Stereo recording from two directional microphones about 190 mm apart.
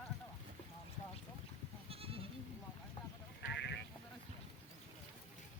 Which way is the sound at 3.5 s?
65° left (ahead or behind).